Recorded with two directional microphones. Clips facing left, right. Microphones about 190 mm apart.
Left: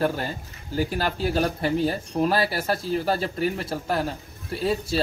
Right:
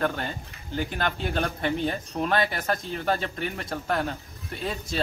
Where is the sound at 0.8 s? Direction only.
5° left (ahead or behind).